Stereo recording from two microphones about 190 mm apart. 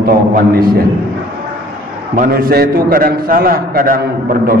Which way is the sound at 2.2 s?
50° right (ahead or behind).